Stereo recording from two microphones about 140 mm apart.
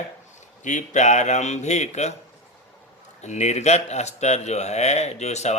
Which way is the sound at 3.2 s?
55° left (ahead or behind).